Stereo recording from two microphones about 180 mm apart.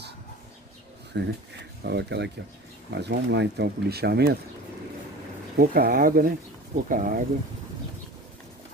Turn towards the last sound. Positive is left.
turn(degrees=-50)  # may be behind; listen again after turning